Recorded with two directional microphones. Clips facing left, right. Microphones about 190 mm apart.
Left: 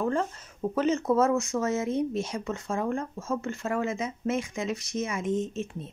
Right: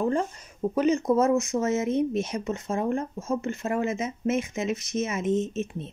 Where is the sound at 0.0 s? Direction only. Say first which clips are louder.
Right 2 dB; 15° right (ahead or behind).